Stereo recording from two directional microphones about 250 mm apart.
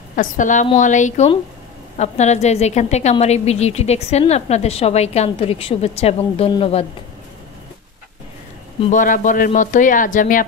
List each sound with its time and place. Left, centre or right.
0.1 s a woman's voice: left
8.9 s a man's voice: left